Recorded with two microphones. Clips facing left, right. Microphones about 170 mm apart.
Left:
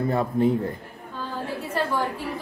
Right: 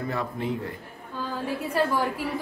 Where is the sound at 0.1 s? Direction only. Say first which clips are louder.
Left 9 dB; 35° left (ahead or behind).